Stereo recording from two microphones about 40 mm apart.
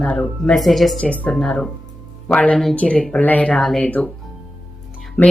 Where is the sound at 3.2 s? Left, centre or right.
Left.